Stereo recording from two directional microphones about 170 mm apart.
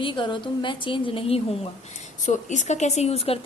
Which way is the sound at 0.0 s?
30° left (ahead or behind).